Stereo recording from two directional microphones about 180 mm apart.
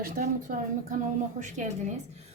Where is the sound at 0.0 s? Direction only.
45° right (ahead or behind).